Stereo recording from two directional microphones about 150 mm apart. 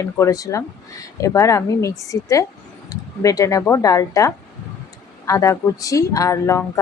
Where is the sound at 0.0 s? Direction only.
20° left (ahead or behind).